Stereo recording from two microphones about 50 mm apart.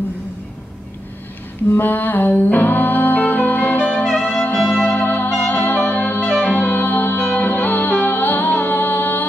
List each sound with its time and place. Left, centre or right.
1.8 s music: left
6.3 s music: left
6.6 s music: left